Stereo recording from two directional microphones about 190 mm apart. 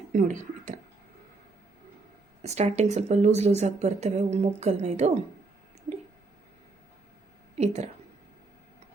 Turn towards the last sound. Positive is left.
turn(degrees=-35)  # may be behind; listen again after turning